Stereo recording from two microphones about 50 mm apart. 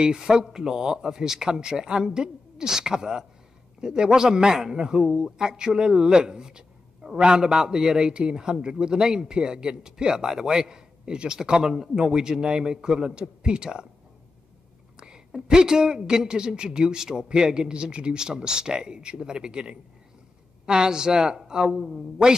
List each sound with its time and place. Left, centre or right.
0.0 s a man's voice: centre
15.0 s a man's voice: centre